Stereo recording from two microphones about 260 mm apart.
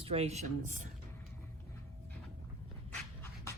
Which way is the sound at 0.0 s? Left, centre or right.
Right.